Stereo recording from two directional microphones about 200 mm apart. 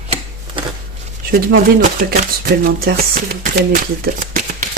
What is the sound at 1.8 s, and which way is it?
Speech, 40° right (ahead or behind).